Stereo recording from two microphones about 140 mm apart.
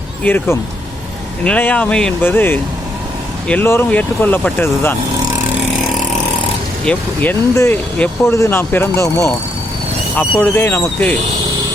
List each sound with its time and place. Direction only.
0.2 s speech: 10° left (ahead or behind)
1.5 s speech: 10° left (ahead or behind)
6.8 s speech: 10° left (ahead or behind)